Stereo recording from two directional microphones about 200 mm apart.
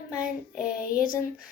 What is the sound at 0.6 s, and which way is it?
Speech, 45° left (ahead or behind).